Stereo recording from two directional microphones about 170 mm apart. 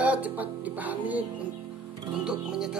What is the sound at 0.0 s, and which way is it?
Speech, 10° right (ahead or behind).